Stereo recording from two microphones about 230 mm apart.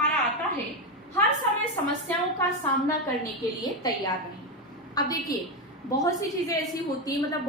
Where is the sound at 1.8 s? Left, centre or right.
Centre.